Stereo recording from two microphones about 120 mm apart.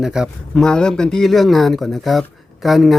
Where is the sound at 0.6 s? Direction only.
5° left (ahead or behind).